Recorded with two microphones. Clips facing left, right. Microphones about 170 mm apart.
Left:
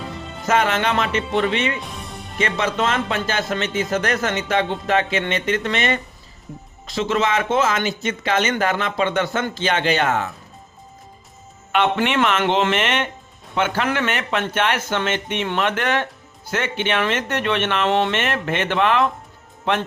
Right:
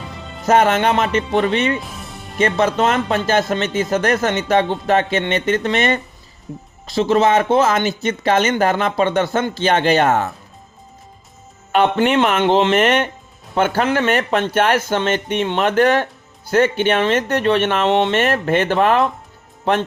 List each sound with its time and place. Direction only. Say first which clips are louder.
0.4 s speech: right 5 dB; 40° right (ahead or behind)
1.8 s music: even; centre (ahead or behind)
2.4 s speech: right 5 dB; 40° right (ahead or behind)
12.0 s speech: right 4 dB; 40° right (ahead or behind)
17.8 s speech: right 2 dB; 25° right (ahead or behind)
18.1 s speech: right 6 dB; 40° right (ahead or behind)